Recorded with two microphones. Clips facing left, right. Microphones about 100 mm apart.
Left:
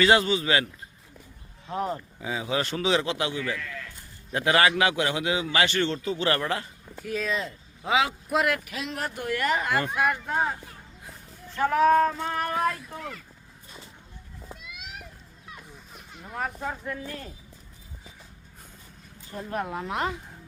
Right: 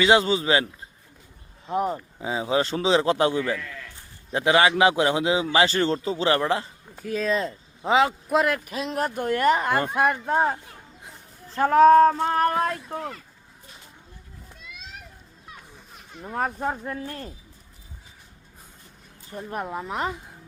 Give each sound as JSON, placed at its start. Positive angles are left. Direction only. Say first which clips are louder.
{"t": 0.0, "sound": "a man's voice", "louder": "right 2 dB", "side_deg": -25}
{"t": 4.3, "sound": "a man's voice", "louder": "right 3 dB", "side_deg": -20}
{"t": 4.7, "sound": "a man's voice", "louder": "right 5 dB", "side_deg": -30}
{"t": 11.5, "sound": "a man's voice", "louder": "right 6 dB", "side_deg": -40}
{"t": 12.5, "sound": "a man's voice", "louder": "right 2 dB", "side_deg": -30}
{"t": 16.3, "sound": "a man's voice", "louder": "right 5 dB", "side_deg": -40}
{"t": 19.5, "sound": "speech", "louder": "even", "side_deg": -5}